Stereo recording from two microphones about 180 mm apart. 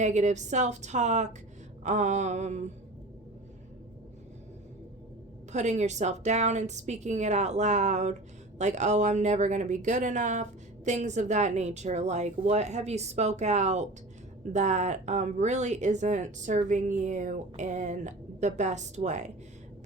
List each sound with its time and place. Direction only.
0.0 s speech: 40° right (ahead or behind)
5.5 s speech: 40° right (ahead or behind)